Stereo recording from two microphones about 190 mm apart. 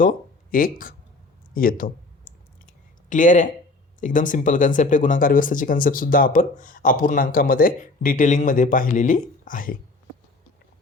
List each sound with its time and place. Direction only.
0.0 s speech: 45° left (ahead or behind)
1.5 s clicking: 50° left (ahead or behind)
4.0 s speech: 45° left (ahead or behind)